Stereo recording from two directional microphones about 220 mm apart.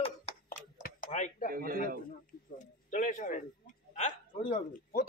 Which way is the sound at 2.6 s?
35° left (ahead or behind).